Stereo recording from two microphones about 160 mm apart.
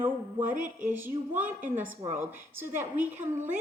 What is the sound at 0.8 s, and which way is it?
A woman's voice, 10° right (ahead or behind).